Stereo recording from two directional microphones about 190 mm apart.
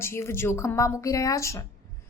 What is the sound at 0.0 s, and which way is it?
A woman's voice, 15° left (ahead or behind).